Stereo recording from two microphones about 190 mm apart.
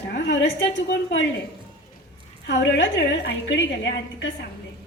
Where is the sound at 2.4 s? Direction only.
65° left (ahead or behind).